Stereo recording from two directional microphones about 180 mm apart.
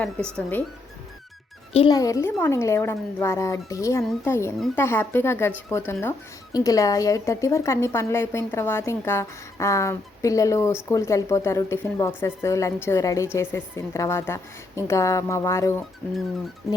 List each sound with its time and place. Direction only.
1.7 s speech: 25° left (ahead or behind)